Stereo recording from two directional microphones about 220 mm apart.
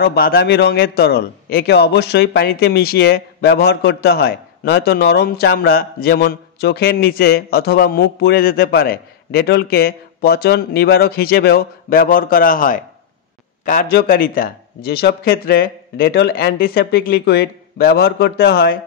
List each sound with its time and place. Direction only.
0.0 s a man's voice: 45° left (ahead or behind)